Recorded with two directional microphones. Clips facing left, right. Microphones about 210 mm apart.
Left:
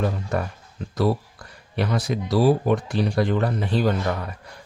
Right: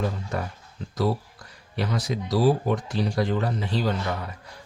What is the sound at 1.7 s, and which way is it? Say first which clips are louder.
Speech: left 3 dB; 60° left (ahead or behind).